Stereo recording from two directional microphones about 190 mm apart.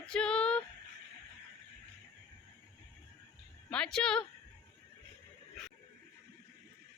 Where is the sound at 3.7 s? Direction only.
5° left (ahead or behind).